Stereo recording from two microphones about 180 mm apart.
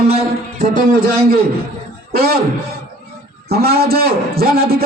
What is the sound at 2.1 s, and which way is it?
Speech, 60° right (ahead or behind).